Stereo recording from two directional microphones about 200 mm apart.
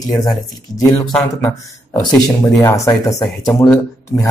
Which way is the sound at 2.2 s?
15° left (ahead or behind).